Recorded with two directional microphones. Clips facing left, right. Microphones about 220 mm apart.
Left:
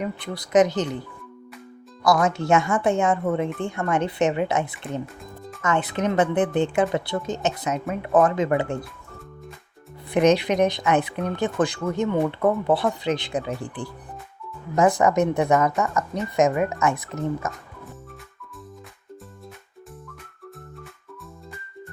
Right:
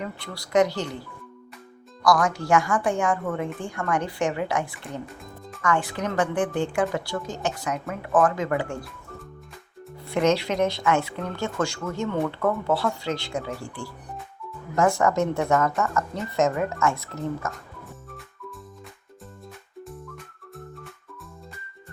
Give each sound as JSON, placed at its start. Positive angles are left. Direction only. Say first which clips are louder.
{"t": 0.0, "sound": "speech", "louder": "left 5 dB", "side_deg": 20}
{"t": 2.0, "sound": "speech", "louder": "left 2 dB", "side_deg": 25}
{"t": 10.1, "sound": "a woman's voice", "louder": "left 4 dB", "side_deg": 15}